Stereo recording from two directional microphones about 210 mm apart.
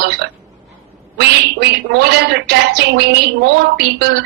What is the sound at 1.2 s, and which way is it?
Speech, 50° right (ahead or behind).